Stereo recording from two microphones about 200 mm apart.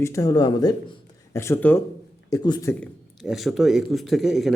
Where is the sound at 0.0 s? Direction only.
15° left (ahead or behind).